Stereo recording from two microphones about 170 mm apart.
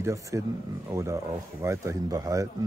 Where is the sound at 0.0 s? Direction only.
15° right (ahead or behind).